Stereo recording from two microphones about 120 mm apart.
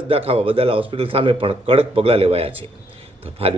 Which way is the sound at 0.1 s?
55° right (ahead or behind).